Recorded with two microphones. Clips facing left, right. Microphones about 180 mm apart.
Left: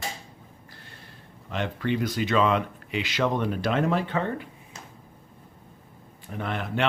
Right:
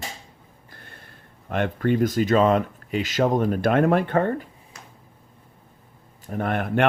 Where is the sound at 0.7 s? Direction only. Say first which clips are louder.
Right 6 dB; 50° right (ahead or behind).